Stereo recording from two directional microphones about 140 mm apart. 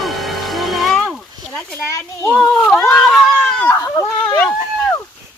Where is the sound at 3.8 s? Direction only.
15° left (ahead or behind).